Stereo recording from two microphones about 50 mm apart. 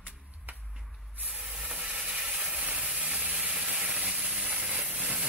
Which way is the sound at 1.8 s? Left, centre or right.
Right.